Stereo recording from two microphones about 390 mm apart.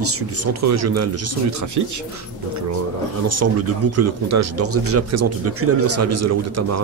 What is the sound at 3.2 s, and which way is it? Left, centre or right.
A man's voice, right.